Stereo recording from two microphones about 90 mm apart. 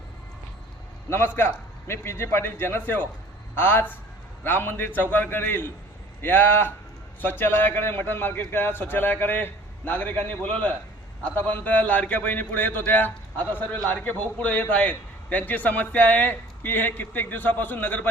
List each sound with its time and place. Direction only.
1.1 s a man's voice: 25° left (ahead or behind)